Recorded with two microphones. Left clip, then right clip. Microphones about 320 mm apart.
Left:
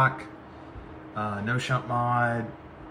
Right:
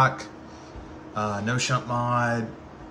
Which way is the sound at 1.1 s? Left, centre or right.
Centre.